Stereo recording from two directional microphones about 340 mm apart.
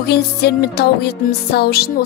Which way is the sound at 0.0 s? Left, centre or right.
Left.